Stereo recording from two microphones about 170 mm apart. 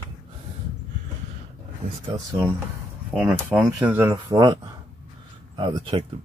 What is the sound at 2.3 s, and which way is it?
Speech, 20° right (ahead or behind).